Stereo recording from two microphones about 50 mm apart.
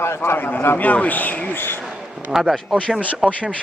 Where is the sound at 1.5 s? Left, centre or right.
Left.